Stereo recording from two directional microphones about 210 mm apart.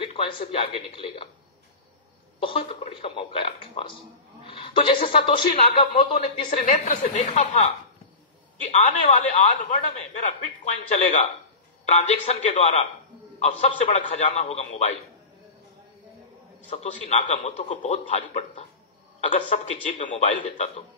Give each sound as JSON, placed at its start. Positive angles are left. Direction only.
{"t": 0.0, "sound": "a man's voice", "side_deg": 25}
{"t": 2.4, "sound": "a man's voice", "side_deg": 25}
{"t": 16.7, "sound": "a man's voice", "side_deg": 35}